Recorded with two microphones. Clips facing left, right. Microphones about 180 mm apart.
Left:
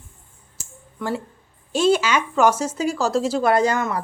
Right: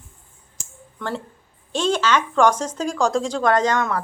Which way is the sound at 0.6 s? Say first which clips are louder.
Left 4 dB; 5° left (ahead or behind).